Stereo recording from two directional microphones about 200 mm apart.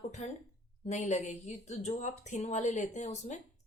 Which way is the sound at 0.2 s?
35° left (ahead or behind).